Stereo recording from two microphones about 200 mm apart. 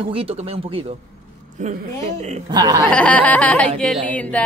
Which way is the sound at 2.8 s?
5° left (ahead or behind).